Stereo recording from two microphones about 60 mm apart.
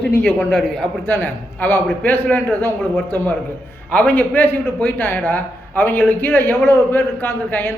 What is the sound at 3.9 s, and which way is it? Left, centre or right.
A woman's voice, left.